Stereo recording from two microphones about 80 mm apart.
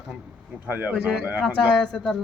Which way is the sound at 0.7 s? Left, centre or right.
Right.